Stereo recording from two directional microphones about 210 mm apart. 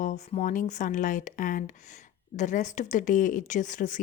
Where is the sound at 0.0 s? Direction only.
35° left (ahead or behind).